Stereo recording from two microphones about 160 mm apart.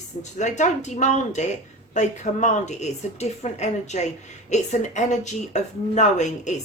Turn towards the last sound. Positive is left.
turn(degrees=50)  # may be behind; listen again after turning